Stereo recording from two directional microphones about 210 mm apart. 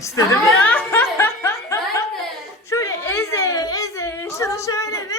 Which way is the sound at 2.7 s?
15° left (ahead or behind).